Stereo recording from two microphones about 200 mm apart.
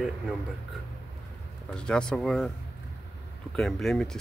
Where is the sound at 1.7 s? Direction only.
5° left (ahead or behind).